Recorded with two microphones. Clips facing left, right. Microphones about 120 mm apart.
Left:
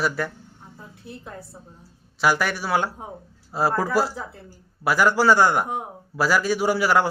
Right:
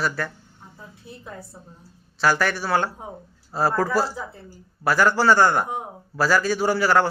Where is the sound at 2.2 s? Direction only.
10° left (ahead or behind).